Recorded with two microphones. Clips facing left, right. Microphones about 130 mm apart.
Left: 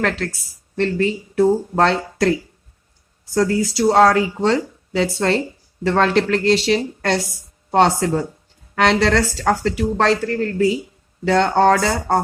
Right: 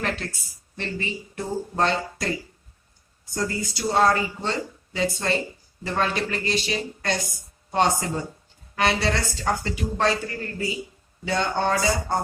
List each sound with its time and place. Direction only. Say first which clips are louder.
0.8 s speech: left 12 dB; 70° left (ahead or behind)
3.3 s speech: left 11 dB; 90° left; by 7.2 s 70° left (ahead or behind)
7.7 s speech: left 7 dB; 80° left